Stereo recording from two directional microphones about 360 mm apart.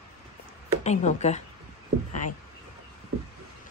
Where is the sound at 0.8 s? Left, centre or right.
Centre.